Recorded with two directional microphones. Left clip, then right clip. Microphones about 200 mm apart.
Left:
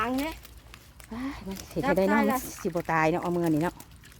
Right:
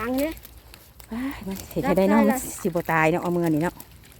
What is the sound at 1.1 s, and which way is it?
A woman's voice, 10° right (ahead or behind).